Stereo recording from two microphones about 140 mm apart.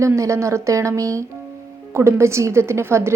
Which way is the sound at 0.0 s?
20° right (ahead or behind).